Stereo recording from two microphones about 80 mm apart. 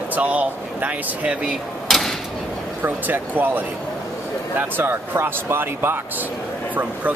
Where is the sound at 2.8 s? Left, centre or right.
Right.